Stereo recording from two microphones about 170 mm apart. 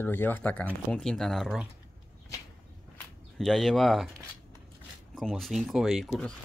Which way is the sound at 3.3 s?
Centre (ahead or behind).